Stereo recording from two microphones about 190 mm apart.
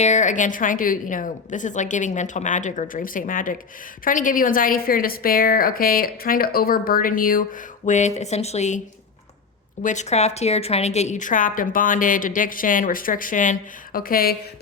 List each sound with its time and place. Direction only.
0.0 s a woman's voice: 40° left (ahead or behind)
9.8 s a woman's voice: 40° left (ahead or behind)